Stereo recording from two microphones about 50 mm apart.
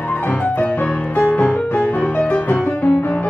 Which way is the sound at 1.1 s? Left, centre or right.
Left.